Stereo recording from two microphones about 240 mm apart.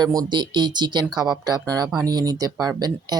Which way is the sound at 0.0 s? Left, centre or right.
Centre.